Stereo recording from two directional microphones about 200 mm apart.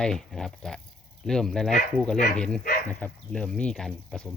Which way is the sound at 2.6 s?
50° left (ahead or behind).